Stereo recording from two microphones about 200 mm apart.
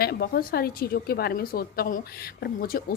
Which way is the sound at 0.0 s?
50° left (ahead or behind).